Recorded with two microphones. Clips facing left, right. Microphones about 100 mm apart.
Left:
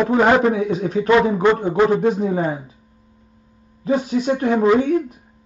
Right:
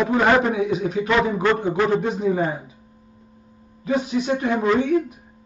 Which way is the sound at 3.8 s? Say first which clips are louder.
Left 3 dB; 40° left (ahead or behind).